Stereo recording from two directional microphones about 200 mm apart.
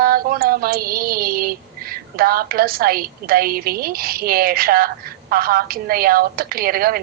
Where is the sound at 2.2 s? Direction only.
50° right (ahead or behind).